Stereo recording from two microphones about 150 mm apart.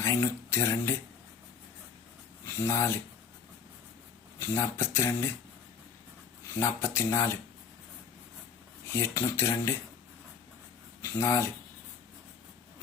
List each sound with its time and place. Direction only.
0.0 s speech: 20° left (ahead or behind)
2.6 s speech: 15° left (ahead or behind)
4.4 s speech: 20° left (ahead or behind)
6.6 s speech: 15° left (ahead or behind)
8.9 s speech: 20° left (ahead or behind)
11.0 s speech: 15° left (ahead or behind)